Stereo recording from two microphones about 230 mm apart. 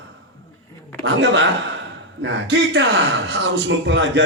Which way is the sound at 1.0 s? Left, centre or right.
Right.